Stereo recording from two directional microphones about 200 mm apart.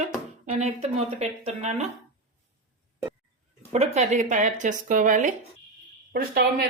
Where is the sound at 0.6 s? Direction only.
35° right (ahead or behind).